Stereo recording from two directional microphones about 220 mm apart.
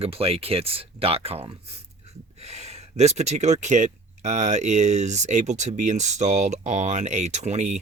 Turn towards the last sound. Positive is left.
turn(degrees=-35)  # may be behind; listen again after turning